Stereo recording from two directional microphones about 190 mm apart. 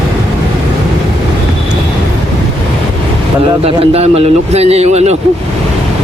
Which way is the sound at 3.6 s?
30° right (ahead or behind).